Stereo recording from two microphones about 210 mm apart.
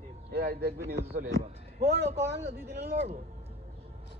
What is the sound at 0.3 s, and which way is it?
Speech, 45° right (ahead or behind).